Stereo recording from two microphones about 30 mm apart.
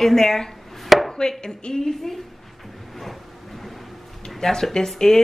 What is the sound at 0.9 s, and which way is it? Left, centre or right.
Chopping, centre.